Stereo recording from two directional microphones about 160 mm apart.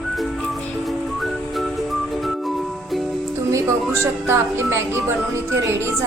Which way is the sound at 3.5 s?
15° right (ahead or behind).